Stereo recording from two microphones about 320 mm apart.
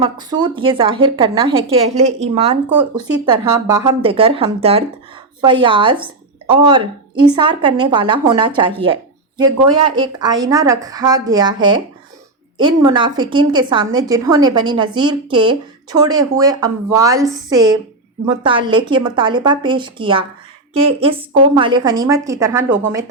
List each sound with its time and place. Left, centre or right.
0.0 s a woman's voice: centre